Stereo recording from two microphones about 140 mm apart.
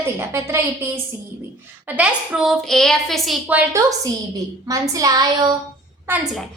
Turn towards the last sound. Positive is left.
turn(degrees=-15)  # may be behind; listen again after turning